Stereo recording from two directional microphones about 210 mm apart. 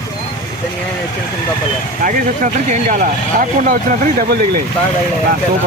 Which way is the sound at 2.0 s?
40° right (ahead or behind).